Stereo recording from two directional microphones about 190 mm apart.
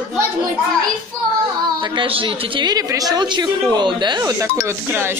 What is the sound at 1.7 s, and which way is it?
A woman's voice, 25° right (ahead or behind).